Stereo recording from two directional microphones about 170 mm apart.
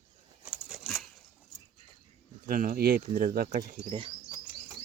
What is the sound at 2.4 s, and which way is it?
Speech, 55° right (ahead or behind).